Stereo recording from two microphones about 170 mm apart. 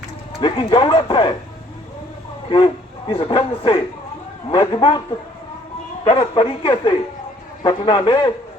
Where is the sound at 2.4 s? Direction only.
30° left (ahead or behind).